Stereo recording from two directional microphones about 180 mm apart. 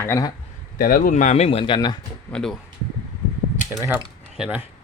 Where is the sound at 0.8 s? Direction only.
50° left (ahead or behind); by 2.0 s 25° left (ahead or behind).